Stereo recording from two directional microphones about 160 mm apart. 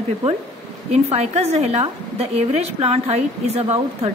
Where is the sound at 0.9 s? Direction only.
40° right (ahead or behind).